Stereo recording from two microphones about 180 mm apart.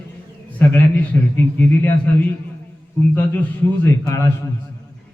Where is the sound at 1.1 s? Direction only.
10° left (ahead or behind).